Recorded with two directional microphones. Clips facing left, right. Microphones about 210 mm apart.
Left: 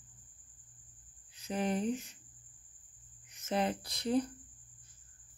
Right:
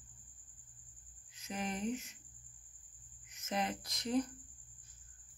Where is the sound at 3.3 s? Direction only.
30° left (ahead or behind).